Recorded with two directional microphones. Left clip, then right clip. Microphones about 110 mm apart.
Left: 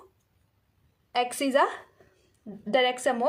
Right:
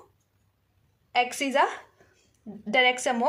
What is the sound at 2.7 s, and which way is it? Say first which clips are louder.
Speech: right 2 dB; 50° left (ahead or behind).